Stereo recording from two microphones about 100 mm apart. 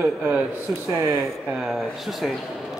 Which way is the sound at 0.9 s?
25° right (ahead or behind).